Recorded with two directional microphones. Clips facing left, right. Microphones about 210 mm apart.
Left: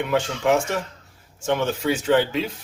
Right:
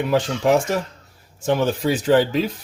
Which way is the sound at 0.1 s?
40° right (ahead or behind).